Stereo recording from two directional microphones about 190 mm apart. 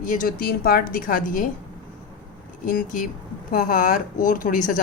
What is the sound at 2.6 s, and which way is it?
Speech, 50° left (ahead or behind).